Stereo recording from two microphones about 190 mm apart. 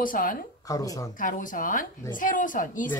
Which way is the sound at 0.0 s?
45° left (ahead or behind).